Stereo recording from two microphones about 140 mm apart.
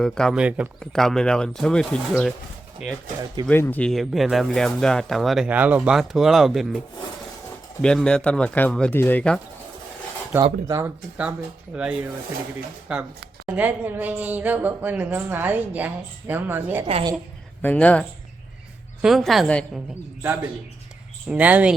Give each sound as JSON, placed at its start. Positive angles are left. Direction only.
{"t": 0.0, "sound": "speech", "side_deg": 5}
{"t": 0.3, "sound": "a woman's voice", "side_deg": -10}
{"t": 0.8, "sound": "speech", "side_deg": 5}
{"t": 3.5, "sound": "speech", "side_deg": 15}
{"t": 10.3, "sound": "a woman's voice", "side_deg": -15}
{"t": 11.2, "sound": "a woman's voice", "side_deg": -10}
{"t": 16.8, "sound": "a woman's voice", "side_deg": -35}
{"t": 17.6, "sound": "speech", "side_deg": 10}
{"t": 19.0, "sound": "speech", "side_deg": 0}
{"t": 21.2, "sound": "a woman's voice", "side_deg": -10}